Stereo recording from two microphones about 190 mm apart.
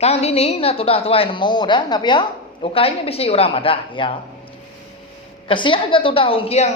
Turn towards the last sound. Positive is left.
turn(degrees=35)  # may be behind; listen again after turning